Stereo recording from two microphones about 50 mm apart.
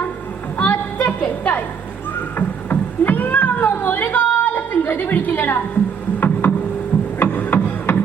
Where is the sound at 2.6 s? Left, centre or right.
Left.